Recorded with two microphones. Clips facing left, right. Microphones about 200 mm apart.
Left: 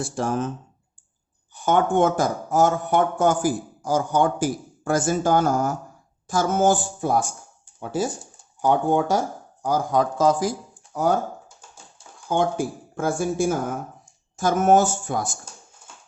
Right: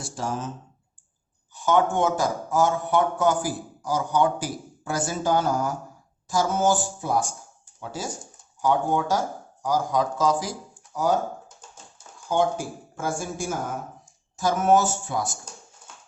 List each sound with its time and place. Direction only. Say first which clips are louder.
0.0 s speech: left 6 dB; 55° left (ahead or behind)
1.5 s speech: left 2 dB; 55° left (ahead or behind)
8.6 s speech: left 3 dB; 55° left (ahead or behind)
12.3 s speech: left 1 dB; 55° left (ahead or behind)